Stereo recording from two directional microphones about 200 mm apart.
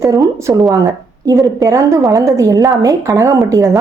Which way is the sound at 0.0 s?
15° right (ahead or behind).